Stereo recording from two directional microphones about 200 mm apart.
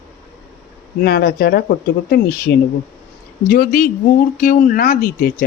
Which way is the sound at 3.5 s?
45° left (ahead or behind).